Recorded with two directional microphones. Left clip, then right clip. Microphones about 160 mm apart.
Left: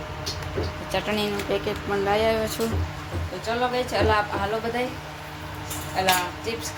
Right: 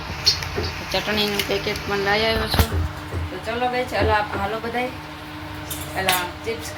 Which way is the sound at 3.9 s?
5° left (ahead or behind).